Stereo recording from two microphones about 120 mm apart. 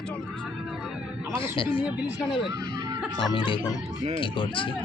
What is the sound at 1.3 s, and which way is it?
Speech, 45° left (ahead or behind).